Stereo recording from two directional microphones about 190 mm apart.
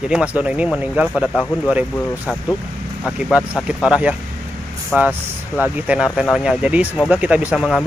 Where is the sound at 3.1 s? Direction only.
5° right (ahead or behind).